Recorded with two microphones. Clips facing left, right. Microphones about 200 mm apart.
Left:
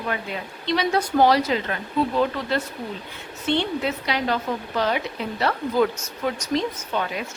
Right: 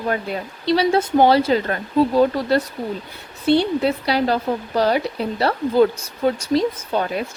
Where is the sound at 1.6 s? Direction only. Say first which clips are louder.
Right 6 dB; 40° right (ahead or behind).